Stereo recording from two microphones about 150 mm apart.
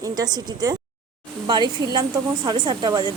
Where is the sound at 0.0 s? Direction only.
25° right (ahead or behind).